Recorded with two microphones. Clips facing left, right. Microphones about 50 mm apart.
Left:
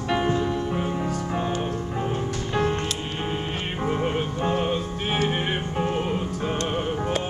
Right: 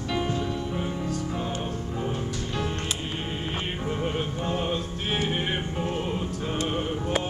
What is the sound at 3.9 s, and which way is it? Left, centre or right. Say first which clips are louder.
Music: left 5 dB; centre.